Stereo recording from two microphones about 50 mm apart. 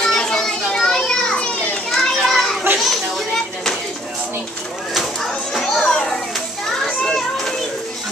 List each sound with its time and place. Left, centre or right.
0.0 s children playing: centre
2.7 s children playing: right
5.2 s children playing: centre